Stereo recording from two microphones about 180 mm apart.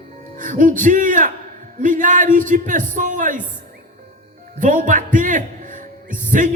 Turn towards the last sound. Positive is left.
turn(degrees=-45)  # may be behind; listen again after turning